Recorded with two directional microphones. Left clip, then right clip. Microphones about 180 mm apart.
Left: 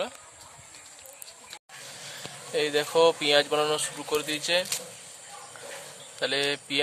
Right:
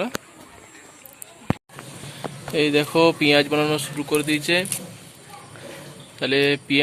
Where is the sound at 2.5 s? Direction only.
5° left (ahead or behind).